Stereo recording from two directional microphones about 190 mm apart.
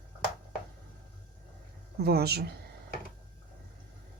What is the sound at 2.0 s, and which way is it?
Speech, 55° right (ahead or behind).